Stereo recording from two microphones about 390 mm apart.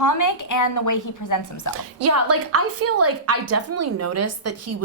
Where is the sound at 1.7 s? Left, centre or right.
Right.